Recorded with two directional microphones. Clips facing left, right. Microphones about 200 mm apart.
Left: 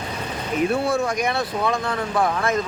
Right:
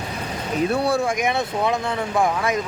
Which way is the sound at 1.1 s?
20° right (ahead or behind).